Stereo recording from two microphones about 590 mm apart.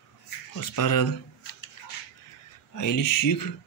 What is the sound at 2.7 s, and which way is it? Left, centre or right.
Speech, left.